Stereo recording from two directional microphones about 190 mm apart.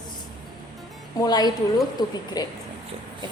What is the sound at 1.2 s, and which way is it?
A woman's voice, 20° left (ahead or behind).